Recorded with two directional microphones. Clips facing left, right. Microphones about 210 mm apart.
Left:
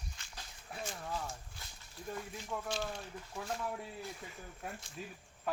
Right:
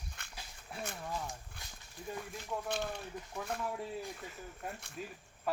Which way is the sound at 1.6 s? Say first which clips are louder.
Right 1 dB; 60° right (ahead or behind).